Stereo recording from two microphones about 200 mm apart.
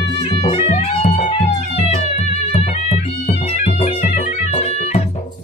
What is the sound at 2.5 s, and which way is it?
Music, 30° left (ahead or behind).